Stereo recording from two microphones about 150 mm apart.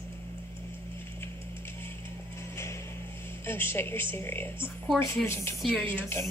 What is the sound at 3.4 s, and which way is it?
Speech, 15° left (ahead or behind).